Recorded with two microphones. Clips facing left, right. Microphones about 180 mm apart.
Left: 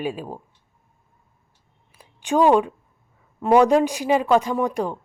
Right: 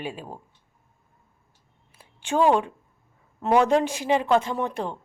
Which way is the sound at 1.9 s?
15° left (ahead or behind).